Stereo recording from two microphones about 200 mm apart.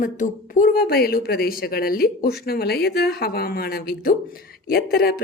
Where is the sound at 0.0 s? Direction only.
40° left (ahead or behind).